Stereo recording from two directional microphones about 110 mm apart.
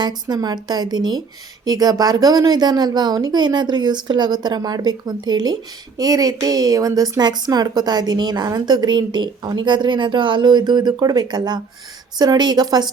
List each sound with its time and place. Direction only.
0.0 s a woman's voice: 40° right (ahead or behind)